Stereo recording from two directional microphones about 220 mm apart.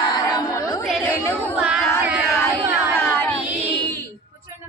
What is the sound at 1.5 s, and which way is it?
Child singing, 5° right (ahead or behind).